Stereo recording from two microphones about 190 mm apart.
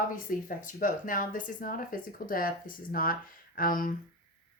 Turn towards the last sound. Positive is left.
turn(degrees=45)  # may be behind; listen again after turning